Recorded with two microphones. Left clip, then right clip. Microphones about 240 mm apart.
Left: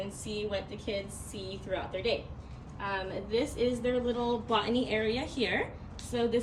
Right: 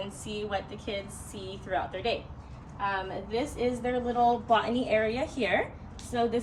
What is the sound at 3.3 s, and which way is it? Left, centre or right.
A woman's voice, centre.